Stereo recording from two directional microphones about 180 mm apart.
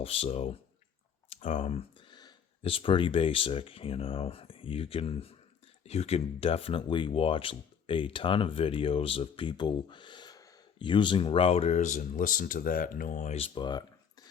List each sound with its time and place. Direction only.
0.0 s speech: 35° left (ahead or behind)